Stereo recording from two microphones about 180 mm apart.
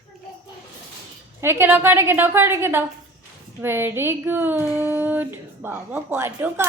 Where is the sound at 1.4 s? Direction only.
15° right (ahead or behind).